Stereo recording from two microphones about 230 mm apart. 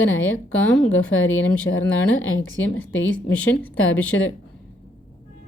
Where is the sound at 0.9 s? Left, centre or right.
Left.